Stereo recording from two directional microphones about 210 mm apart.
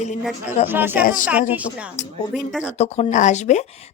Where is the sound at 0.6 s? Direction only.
10° right (ahead or behind).